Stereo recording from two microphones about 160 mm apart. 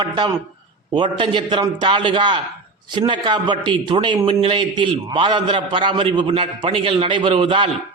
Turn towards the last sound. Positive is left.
turn(degrees=-30)  # may be behind; listen again after turning